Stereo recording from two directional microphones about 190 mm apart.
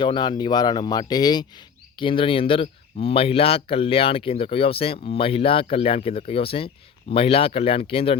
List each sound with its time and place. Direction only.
0.0 s speech: 25° left (ahead or behind)